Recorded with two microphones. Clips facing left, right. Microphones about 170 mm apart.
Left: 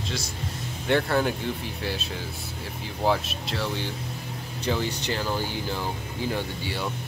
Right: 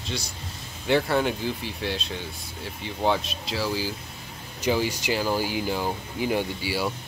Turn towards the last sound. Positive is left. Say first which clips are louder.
# right 3 dB
turn(degrees=-5)  # may be behind; listen again after turning